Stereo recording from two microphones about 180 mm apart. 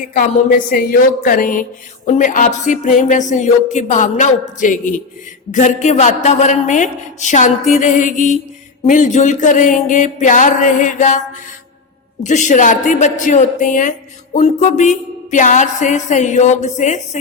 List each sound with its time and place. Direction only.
0.0 s speech: 45° left (ahead or behind)
12.2 s speech: 45° left (ahead or behind)
14.3 s music: 40° left (ahead or behind)